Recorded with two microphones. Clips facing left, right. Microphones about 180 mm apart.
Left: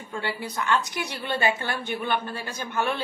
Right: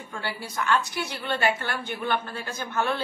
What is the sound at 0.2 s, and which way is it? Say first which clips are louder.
A woman's voice: left 1 dB; 20° left (ahead or behind).